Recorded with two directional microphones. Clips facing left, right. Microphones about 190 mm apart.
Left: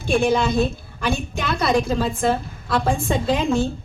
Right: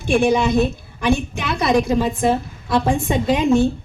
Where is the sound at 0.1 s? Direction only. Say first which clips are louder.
Right 2 dB; 15° right (ahead or behind).